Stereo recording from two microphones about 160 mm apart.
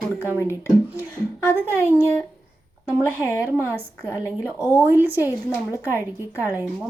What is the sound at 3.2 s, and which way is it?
A woman's voice, 15° left (ahead or behind).